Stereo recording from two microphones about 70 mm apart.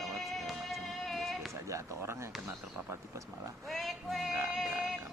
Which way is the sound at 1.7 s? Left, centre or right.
Right.